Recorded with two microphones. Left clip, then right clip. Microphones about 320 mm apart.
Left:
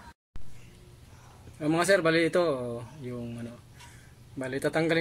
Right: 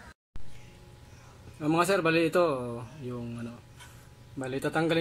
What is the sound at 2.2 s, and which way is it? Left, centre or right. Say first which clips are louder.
Speech: even; left.